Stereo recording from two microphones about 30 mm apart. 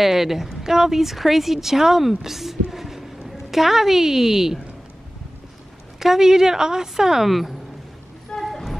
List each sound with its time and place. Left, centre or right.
0.0 s a woman's voice: centre
5.9 s a woman's voice: centre
7.2 s a woman's voice: centre
8.3 s a sound: left